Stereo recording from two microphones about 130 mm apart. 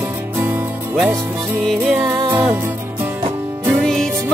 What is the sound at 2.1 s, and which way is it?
Music, 30° right (ahead or behind).